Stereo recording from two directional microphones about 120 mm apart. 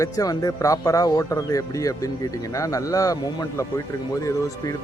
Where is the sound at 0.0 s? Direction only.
30° left (ahead or behind).